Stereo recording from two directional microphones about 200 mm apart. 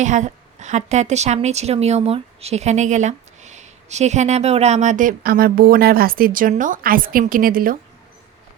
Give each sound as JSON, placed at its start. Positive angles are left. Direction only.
{"t": 0.0, "sound": "a woman's voice", "side_deg": -35}